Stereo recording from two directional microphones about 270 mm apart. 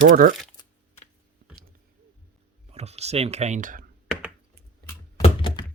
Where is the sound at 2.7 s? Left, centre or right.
Right.